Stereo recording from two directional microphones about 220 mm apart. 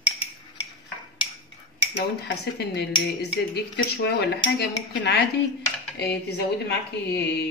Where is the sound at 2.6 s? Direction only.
50° left (ahead or behind).